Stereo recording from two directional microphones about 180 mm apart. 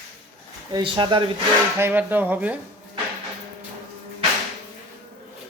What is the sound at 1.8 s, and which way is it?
Speech, 10° right (ahead or behind).